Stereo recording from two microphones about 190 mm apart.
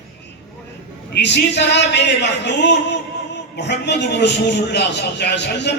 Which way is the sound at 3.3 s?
65° left (ahead or behind).